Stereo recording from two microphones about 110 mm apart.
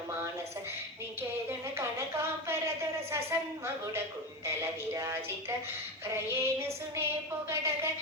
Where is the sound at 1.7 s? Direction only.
25° right (ahead or behind).